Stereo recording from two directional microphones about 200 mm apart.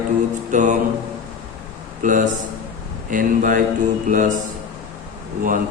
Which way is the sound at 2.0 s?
40° right (ahead or behind).